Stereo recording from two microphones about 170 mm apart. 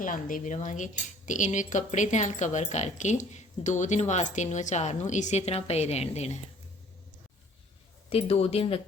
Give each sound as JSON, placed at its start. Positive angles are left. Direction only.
{"t": 0.0, "sound": "speech", "side_deg": 50}
{"t": 8.1, "sound": "speech", "side_deg": 35}